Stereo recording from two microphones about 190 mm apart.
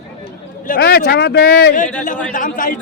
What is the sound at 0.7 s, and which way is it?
Speech, 55° left (ahead or behind).